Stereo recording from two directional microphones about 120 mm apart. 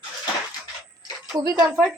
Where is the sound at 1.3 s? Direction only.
35° right (ahead or behind).